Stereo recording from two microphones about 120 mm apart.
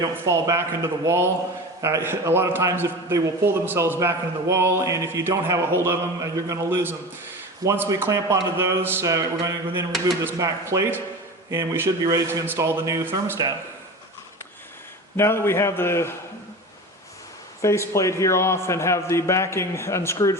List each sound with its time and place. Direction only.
0.0 s a man's voice: 25° right (ahead or behind)
15.1 s a man's voice: 20° left (ahead or behind)
17.6 s a man's voice: 25° left (ahead or behind)